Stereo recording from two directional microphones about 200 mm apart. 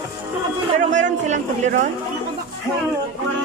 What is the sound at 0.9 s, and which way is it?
Speech, 35° right (ahead or behind).